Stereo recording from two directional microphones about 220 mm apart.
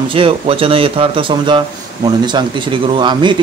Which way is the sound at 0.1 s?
25° right (ahead or behind).